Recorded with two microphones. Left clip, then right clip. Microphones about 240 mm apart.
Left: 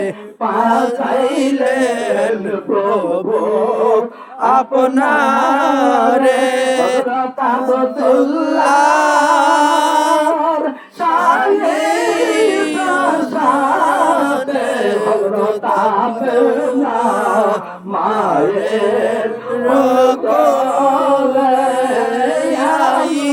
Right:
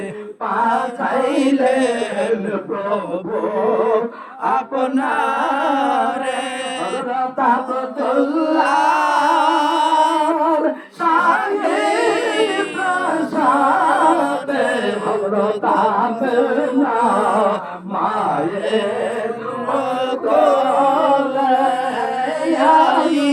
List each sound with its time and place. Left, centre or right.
1.4 s chant: left
3.7 s chant: left
8.1 s music: left
14.8 s mantra: left
16.7 s music: left
19.7 s mantra: left
22.6 s a sound: left